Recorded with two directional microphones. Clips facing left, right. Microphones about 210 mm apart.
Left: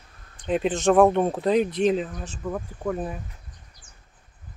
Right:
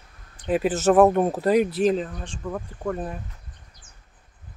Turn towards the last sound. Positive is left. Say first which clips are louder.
# even
turn(degrees=5)  # may be behind; listen again after turning